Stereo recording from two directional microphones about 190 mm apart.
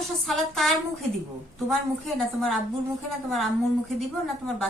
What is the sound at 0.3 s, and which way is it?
Speech, centre (ahead or behind).